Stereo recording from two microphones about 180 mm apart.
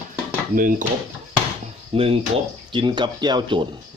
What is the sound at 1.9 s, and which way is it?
A man's voice, 30° right (ahead or behind).